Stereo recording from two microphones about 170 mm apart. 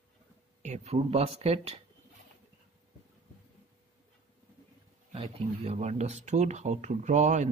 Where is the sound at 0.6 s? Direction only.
40° right (ahead or behind).